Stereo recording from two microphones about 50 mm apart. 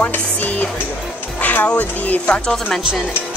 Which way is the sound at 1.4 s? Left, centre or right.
Left.